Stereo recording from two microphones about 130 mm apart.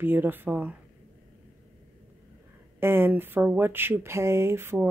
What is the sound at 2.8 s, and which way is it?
Speech, 15° right (ahead or behind).